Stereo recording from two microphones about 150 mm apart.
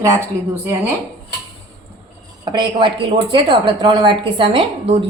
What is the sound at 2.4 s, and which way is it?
Speech, 35° right (ahead or behind).